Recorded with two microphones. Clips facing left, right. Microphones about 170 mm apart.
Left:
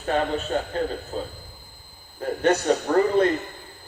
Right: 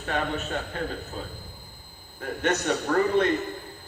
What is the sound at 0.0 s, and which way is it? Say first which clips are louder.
A man's voice: left 5 dB; 30° left (ahead or behind).